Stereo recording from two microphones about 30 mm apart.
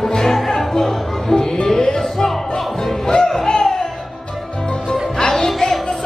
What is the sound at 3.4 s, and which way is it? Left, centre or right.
Music, left.